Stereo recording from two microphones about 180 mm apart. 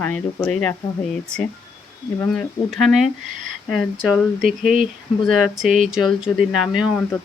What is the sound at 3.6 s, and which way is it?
Speech, centre (ahead or behind).